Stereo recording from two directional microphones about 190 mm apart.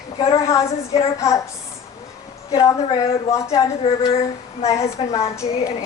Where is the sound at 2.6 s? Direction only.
15° left (ahead or behind).